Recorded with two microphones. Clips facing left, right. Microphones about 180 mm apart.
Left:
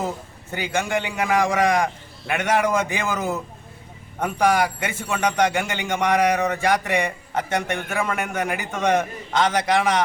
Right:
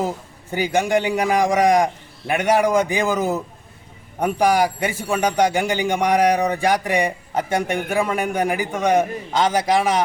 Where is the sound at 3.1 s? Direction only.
35° right (ahead or behind).